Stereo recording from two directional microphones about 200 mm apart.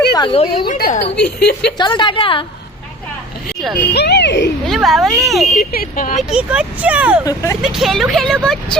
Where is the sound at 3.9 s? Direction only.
55° left (ahead or behind).